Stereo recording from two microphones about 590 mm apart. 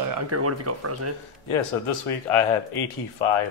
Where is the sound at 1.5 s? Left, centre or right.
Left.